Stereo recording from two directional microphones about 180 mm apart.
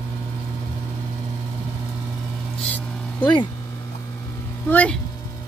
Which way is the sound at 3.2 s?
25° left (ahead or behind).